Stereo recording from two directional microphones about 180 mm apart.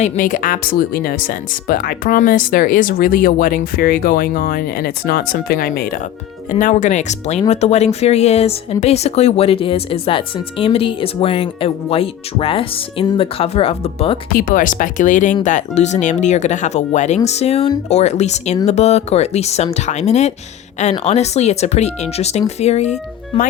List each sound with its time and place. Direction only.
0.0 s speech: 45° left (ahead or behind); by 14.2 s 30° left (ahead or behind)
14.3 s speech: 50° left (ahead or behind)